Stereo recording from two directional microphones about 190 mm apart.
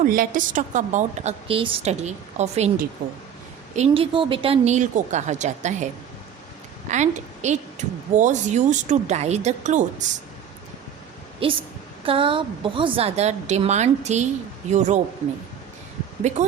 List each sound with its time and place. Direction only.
0.0 s a woman's voice: 45° right (ahead or behind)
3.8 s a woman's voice: 30° right (ahead or behind)
11.4 s a woman's voice: 30° right (ahead or behind)